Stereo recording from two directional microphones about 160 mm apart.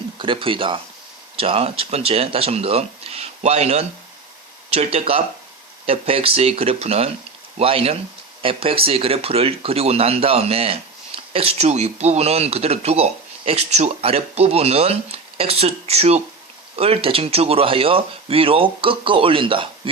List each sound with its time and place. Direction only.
0.2 s speech: 30° right (ahead or behind)